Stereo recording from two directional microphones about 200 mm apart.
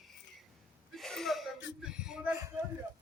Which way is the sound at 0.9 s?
Centre (ahead or behind).